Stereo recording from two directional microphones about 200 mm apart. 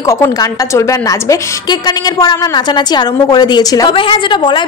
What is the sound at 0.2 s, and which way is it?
A woman's voice, 15° left (ahead or behind).